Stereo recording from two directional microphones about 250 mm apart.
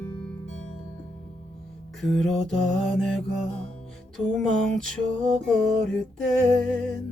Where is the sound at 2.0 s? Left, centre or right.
Centre.